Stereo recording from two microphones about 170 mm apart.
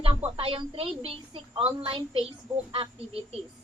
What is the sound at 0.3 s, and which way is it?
A woman's voice, 30° right (ahead or behind).